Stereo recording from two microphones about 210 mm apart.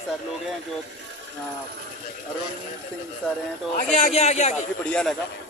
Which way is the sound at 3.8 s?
35° left (ahead or behind).